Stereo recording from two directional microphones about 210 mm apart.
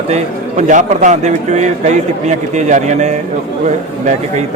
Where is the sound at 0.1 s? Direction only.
35° right (ahead or behind).